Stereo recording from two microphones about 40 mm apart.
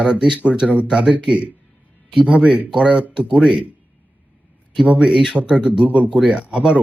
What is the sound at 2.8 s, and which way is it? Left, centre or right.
Speech, right.